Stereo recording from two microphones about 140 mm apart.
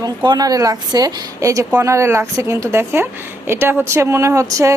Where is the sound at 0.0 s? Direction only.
30° right (ahead or behind).